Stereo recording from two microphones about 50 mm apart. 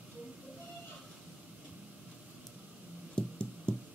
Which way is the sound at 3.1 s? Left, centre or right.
Centre.